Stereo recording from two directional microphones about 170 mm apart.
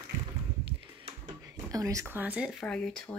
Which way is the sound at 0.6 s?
30° right (ahead or behind).